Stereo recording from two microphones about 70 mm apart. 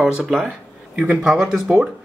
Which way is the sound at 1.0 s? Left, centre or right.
Right.